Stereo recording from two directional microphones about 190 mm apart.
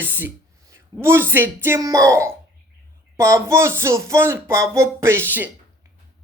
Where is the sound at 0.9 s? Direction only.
20° right (ahead or behind).